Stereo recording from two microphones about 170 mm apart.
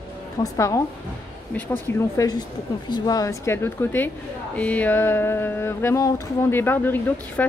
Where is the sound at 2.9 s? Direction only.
25° left (ahead or behind).